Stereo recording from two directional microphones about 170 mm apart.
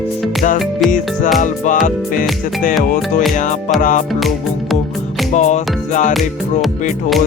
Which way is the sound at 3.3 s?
45° left (ahead or behind).